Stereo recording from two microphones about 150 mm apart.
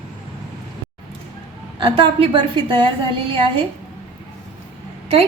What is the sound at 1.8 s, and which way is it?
A woman's voice, 35° right (ahead or behind).